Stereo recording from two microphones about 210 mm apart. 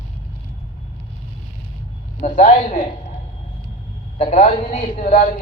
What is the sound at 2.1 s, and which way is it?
Speech, 35° left (ahead or behind).